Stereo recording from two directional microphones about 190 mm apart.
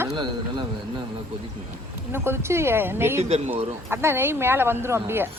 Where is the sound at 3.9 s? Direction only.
10° right (ahead or behind).